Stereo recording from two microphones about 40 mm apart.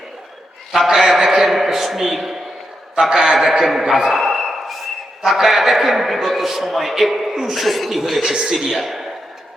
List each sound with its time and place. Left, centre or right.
0.9 s a man's voice: centre